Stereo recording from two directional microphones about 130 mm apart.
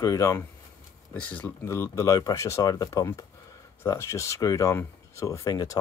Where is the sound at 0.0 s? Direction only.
25° left (ahead or behind).